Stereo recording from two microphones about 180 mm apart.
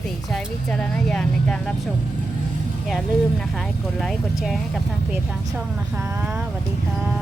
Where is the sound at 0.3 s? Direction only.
Centre (ahead or behind).